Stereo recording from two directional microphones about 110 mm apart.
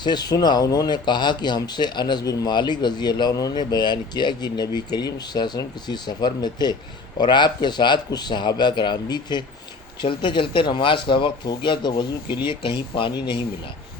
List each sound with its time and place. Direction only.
0.0 s speech: 40° left (ahead or behind)